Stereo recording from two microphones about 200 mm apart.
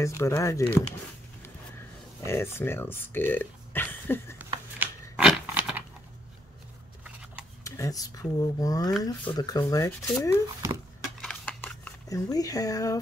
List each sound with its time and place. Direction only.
0.0 s speech: 15° left (ahead or behind)
2.2 s speech: 10° left (ahead or behind)
4.7 s a sound: 5° right (ahead or behind)
7.6 s speech: 15° left (ahead or behind)
11.1 s shuffling cards: 5° left (ahead or behind)